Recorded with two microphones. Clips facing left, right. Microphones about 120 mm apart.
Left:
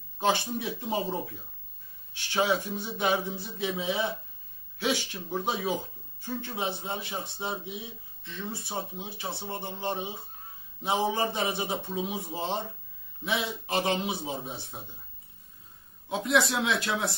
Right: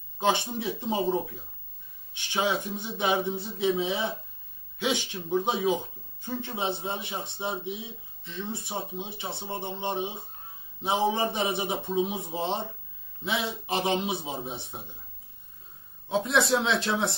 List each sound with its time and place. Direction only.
0.2 s speech: 20° right (ahead or behind)
16.1 s speech: 25° right (ahead or behind)